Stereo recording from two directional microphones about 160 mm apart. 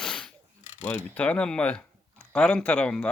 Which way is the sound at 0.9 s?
10° left (ahead or behind).